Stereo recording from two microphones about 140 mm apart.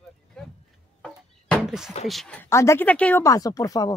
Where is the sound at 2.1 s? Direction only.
Centre (ahead or behind).